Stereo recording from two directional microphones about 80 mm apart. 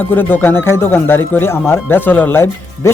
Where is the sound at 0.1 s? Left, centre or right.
Left.